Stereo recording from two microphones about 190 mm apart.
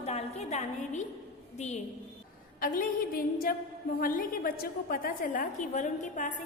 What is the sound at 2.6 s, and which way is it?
A woman's voice, 50° left (ahead or behind).